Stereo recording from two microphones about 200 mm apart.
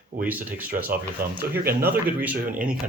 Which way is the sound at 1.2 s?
45° right (ahead or behind).